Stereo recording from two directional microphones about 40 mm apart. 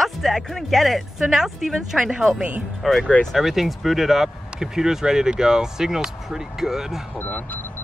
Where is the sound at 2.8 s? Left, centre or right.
Centre.